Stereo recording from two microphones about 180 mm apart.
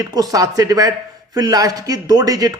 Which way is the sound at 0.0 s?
20° right (ahead or behind).